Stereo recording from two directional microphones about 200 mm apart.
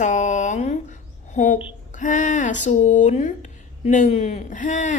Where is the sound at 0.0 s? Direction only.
35° left (ahead or behind).